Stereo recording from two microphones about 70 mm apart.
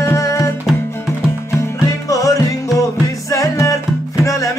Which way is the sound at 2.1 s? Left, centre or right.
Left.